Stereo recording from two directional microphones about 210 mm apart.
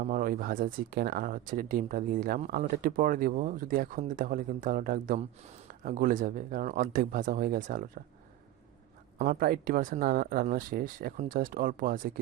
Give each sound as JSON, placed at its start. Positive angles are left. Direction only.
{"t": 0.0, "sound": "speech", "side_deg": -45}
{"t": 9.1, "sound": "speech", "side_deg": -45}